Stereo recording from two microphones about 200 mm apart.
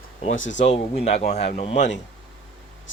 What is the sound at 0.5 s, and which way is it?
Speech, 35° left (ahead or behind).